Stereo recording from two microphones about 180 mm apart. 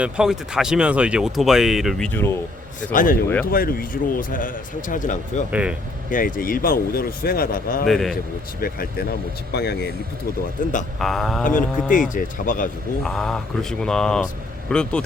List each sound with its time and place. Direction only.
0.0 s speech: 5° right (ahead or behind)
2.0 s speech: 10° left (ahead or behind)
2.9 s speech: 50° left (ahead or behind)
5.5 s speech: 5° right (ahead or behind)
6.1 s speech: 50° left (ahead or behind)
7.9 s speech: centre (ahead or behind)
8.6 s speech: 55° left (ahead or behind)
9.5 s speech: 65° left (ahead or behind)
10.6 s speech: 50° left (ahead or behind)
11.0 s speech: centre (ahead or behind)
11.4 s speech: 45° left (ahead or behind)
13.0 s speech: centre (ahead or behind)